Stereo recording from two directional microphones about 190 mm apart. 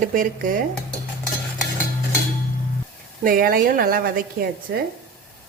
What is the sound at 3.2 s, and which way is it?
A woman's voice, 50° right (ahead or behind).